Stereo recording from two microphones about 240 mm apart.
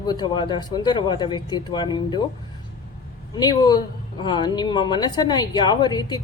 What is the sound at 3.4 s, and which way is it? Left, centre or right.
Speech, centre.